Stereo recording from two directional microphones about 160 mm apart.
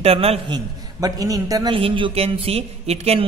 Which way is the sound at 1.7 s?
35° right (ahead or behind).